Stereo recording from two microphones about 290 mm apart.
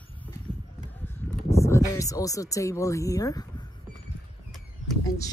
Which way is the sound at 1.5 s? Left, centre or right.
Centre.